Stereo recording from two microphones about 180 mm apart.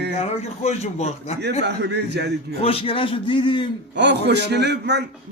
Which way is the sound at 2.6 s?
30° left (ahead or behind).